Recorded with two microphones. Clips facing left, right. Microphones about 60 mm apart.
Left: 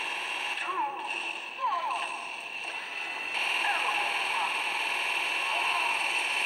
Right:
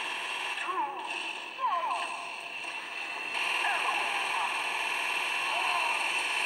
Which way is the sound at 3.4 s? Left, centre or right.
Centre.